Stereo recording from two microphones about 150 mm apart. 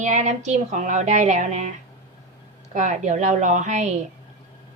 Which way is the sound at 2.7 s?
55° right (ahead or behind).